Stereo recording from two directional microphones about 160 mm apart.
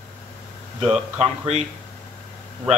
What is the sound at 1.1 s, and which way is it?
Speech, 40° right (ahead or behind).